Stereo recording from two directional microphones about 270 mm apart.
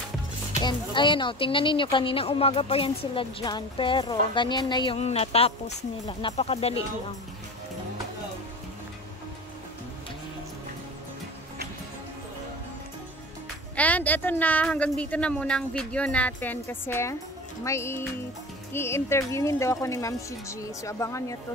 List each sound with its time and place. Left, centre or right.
0.6 s speech: centre
13.7 s a woman's voice: centre